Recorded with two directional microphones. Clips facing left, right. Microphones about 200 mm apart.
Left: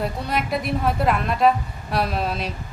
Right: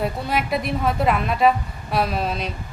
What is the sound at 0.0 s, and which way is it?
A woman's voice, centre (ahead or behind).